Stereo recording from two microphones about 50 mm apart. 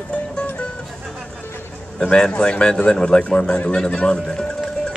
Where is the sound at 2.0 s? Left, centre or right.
Centre.